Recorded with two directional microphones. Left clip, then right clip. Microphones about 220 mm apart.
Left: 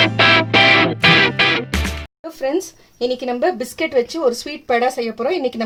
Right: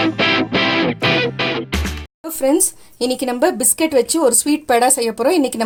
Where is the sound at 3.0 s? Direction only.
45° right (ahead or behind).